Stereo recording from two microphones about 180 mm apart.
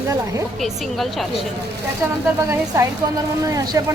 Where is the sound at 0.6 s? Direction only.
Centre (ahead or behind).